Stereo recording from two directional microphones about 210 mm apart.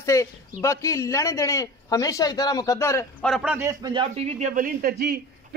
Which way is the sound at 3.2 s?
5° right (ahead or behind).